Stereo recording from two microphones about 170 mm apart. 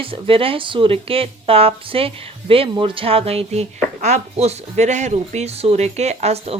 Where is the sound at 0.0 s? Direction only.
30° right (ahead or behind).